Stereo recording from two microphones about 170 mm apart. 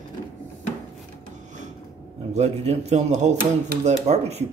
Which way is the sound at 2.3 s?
40° right (ahead or behind).